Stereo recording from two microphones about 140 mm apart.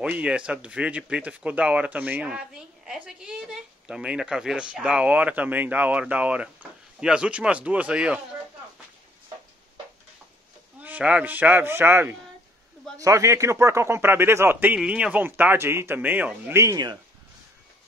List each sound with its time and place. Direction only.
0.0 s speech: 10° right (ahead or behind)
10.8 s speech: 10° right (ahead or behind); by 17.0 s 30° right (ahead or behind)